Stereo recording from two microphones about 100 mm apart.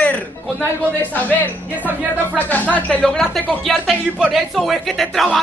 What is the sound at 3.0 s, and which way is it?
Speech, 5° left (ahead or behind).